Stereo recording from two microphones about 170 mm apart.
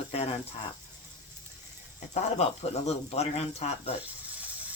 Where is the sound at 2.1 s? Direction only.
40° left (ahead or behind).